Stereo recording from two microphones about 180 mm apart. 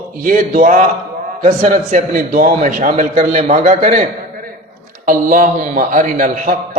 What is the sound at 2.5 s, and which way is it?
A man's voice, 40° right (ahead or behind).